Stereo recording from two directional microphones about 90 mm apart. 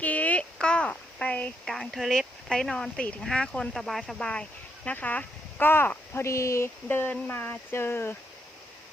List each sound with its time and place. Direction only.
0.0 s a sound: 15° left (ahead or behind)
1.6 s speech: centre (ahead or behind); by 6.7 s 35° left (ahead or behind)
6.8 s speech: 20° left (ahead or behind)